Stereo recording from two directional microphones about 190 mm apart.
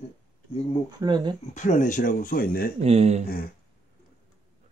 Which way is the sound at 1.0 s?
20° right (ahead or behind).